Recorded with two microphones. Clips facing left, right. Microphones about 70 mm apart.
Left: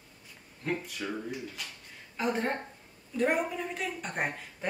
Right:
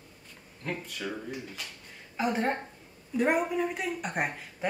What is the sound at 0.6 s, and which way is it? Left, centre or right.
Speech, centre.